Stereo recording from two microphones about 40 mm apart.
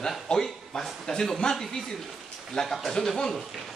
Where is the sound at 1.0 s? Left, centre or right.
Centre.